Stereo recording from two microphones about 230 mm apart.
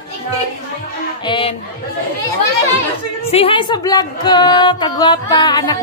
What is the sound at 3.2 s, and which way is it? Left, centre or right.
A woman's voice, left.